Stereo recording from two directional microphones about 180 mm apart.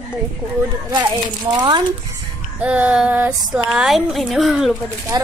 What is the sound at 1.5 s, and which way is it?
Speech, 20° right (ahead or behind).